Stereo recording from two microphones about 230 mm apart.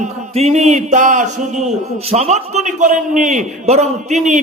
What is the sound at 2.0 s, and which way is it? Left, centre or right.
A man's voice, right.